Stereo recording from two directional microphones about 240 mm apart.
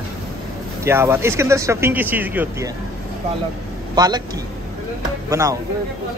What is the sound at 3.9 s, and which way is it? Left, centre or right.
Speech, centre.